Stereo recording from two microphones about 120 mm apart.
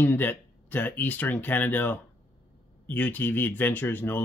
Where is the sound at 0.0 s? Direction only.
15° left (ahead or behind).